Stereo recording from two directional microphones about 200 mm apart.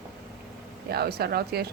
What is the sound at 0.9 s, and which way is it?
Speech, 50° right (ahead or behind).